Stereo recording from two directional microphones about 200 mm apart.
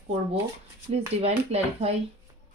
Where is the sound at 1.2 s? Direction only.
30° right (ahead or behind).